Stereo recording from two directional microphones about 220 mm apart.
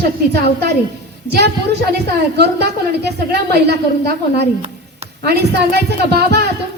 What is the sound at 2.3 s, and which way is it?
Speech, 50° right (ahead or behind).